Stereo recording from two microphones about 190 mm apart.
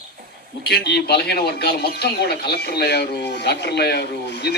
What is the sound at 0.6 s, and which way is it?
Speech, 60° left (ahead or behind).